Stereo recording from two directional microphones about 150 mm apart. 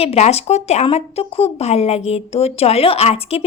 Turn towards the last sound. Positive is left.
turn(degrees=40)  # may be behind; listen again after turning